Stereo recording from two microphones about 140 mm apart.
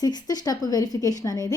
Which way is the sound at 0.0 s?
30° left (ahead or behind).